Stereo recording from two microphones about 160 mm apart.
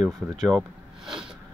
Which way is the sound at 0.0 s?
Centre (ahead or behind).